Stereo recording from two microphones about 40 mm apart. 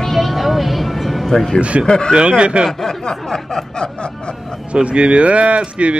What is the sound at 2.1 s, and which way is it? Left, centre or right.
Speech, right.